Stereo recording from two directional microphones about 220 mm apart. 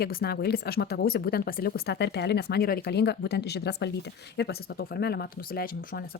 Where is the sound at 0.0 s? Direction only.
45° left (ahead or behind).